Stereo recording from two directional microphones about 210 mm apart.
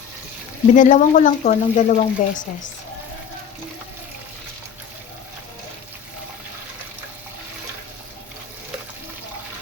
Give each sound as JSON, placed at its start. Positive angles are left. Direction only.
{"t": 0.7, "sound": "speech", "side_deg": 35}